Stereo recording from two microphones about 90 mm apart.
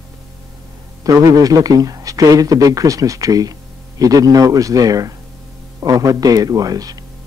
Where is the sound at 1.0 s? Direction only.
40° right (ahead or behind).